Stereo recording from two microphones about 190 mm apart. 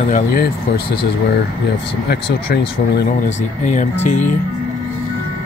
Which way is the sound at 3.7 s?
40° left (ahead or behind).